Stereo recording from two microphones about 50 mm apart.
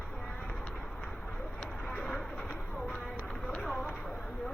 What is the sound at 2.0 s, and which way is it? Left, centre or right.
Vehicle, left.